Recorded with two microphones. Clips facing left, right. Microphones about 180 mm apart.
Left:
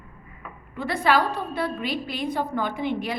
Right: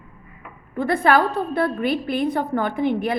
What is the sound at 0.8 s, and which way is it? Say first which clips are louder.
A woman's voice: right 4 dB; 55° right (ahead or behind).